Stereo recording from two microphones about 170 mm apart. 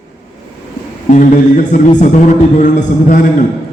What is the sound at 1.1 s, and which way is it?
A man's voice, 45° left (ahead or behind).